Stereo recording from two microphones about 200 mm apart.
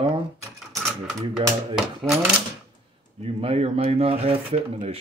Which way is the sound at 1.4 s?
25° right (ahead or behind).